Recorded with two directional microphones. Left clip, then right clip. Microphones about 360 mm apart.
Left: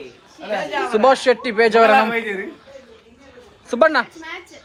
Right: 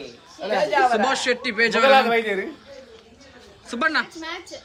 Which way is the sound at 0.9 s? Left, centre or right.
Centre.